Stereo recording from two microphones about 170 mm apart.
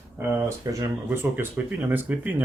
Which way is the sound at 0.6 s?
20° right (ahead or behind).